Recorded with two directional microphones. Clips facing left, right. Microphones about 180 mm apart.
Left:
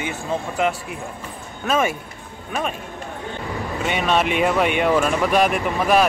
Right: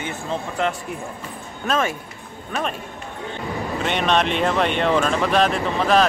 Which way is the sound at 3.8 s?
5° left (ahead or behind).